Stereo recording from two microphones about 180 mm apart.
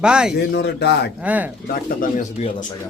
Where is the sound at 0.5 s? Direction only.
70° left (ahead or behind).